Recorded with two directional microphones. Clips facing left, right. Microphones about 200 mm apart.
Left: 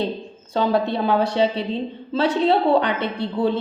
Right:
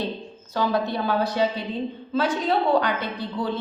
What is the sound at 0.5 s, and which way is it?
A woman's voice, 25° left (ahead or behind).